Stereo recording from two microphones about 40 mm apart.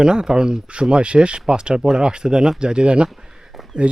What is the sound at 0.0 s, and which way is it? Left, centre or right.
Speech, centre.